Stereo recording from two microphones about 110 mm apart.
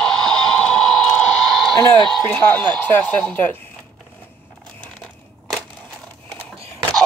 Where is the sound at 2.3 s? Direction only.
15° left (ahead or behind).